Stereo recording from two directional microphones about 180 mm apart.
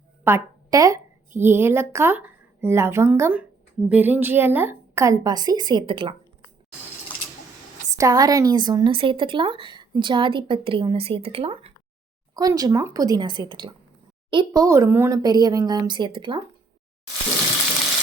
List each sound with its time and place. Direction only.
0.3 s a woman's voice: 15° right (ahead or behind)
7.9 s speech: 20° right (ahead or behind)
12.3 s speech: 20° right (ahead or behind)